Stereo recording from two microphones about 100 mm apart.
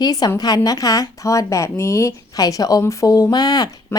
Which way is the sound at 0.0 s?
40° left (ahead or behind).